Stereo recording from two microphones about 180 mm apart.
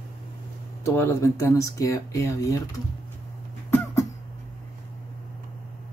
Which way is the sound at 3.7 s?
15° left (ahead or behind).